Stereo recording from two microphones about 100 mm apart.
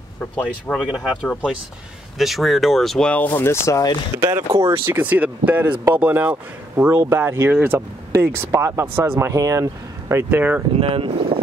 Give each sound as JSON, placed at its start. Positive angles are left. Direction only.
{"t": 0.4, "sound": "speech", "side_deg": 10}
{"t": 0.8, "sound": "speech", "side_deg": -5}
{"t": 3.1, "sound": "speech", "side_deg": 15}
{"t": 4.2, "sound": "speech", "side_deg": -35}
{"t": 4.7, "sound": "speech", "side_deg": -20}
{"t": 9.3, "sound": "speech", "side_deg": -35}
{"t": 10.3, "sound": "speech", "side_deg": -15}
{"t": 10.8, "sound": "speech", "side_deg": -65}